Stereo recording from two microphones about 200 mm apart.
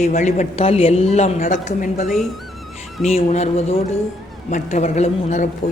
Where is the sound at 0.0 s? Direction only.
35° left (ahead or behind).